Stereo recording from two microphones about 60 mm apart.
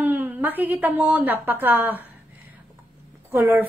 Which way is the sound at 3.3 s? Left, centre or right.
Right.